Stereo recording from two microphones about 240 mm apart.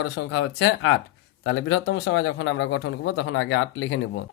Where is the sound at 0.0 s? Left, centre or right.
Left.